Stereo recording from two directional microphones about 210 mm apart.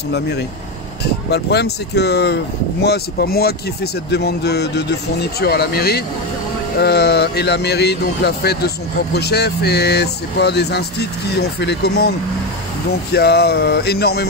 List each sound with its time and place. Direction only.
0.1 s speech: 50° left (ahead or behind)
13.1 s speech: 50° left (ahead or behind)